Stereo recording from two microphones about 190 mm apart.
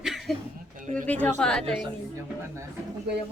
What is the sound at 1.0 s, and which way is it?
Speech, 10° left (ahead or behind).